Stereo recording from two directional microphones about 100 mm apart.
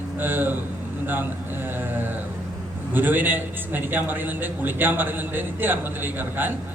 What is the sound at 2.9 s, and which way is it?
A man's voice, 20° right (ahead or behind).